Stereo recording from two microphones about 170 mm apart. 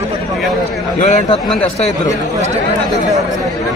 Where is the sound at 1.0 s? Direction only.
40° left (ahead or behind).